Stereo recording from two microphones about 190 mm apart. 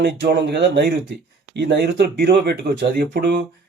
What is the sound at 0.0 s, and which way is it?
Speech, 65° right (ahead or behind).